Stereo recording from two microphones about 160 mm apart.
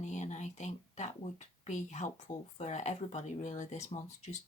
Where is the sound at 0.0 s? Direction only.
50° left (ahead or behind).